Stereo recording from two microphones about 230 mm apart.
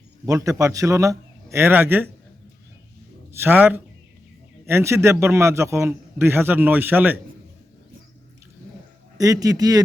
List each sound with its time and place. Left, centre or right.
0.3 s a man's voice: centre
3.4 s a man's voice: centre
9.1 s a man's voice: centre